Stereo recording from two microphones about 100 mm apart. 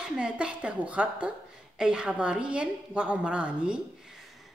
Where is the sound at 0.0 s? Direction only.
10° right (ahead or behind).